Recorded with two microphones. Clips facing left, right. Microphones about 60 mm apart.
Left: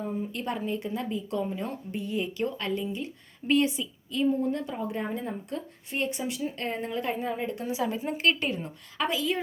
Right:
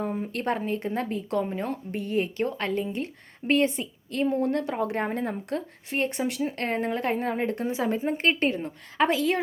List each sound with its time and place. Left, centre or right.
0.0 s speech: right
1.4 s a woman's voice: right
5.0 s speech: right
7.6 s a woman's voice: right
9.0 s a woman's voice: right